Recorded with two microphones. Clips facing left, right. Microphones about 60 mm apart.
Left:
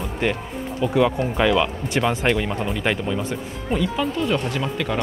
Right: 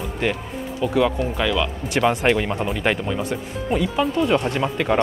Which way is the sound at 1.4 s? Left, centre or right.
Centre.